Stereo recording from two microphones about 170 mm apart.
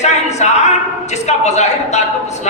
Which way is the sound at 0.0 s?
40° left (ahead or behind).